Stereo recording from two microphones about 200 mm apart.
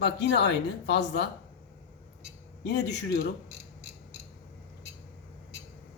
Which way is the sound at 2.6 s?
55° left (ahead or behind).